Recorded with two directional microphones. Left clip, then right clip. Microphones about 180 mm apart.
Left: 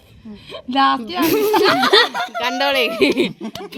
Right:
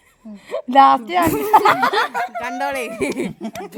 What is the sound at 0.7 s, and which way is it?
Speech, 35° right (ahead or behind).